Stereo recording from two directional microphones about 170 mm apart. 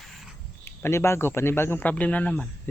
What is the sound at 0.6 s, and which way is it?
A man's voice, 15° left (ahead or behind).